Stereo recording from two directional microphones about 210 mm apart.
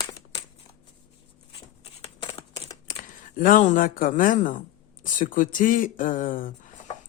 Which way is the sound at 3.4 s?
40° left (ahead or behind).